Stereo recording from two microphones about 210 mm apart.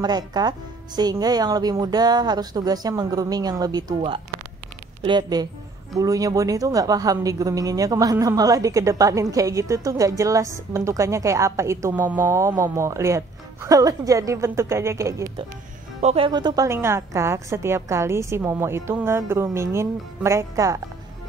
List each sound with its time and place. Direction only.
0.0 s a woman's voice: 20° right (ahead or behind)
16.0 s a woman's voice: 30° right (ahead or behind)